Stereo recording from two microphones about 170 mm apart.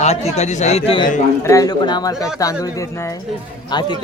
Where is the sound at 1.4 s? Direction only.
20° left (ahead or behind).